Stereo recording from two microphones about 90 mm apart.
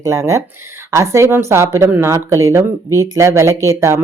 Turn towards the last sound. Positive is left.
turn(degrees=-35)  # may be behind; listen again after turning